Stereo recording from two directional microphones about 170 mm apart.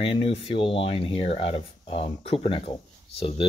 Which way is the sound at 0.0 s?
30° left (ahead or behind).